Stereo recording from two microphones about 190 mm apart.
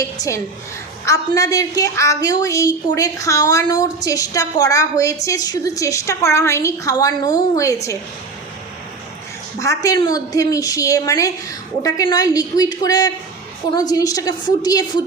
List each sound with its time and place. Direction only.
0.2 s a woman's voice: 15° left (ahead or behind)
9.6 s a woman's voice: 15° left (ahead or behind)